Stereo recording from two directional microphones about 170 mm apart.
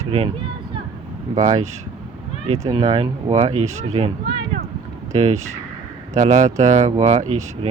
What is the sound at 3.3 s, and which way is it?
Speech, 40° right (ahead or behind).